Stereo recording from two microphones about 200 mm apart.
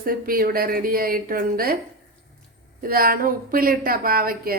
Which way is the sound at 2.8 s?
45° right (ahead or behind).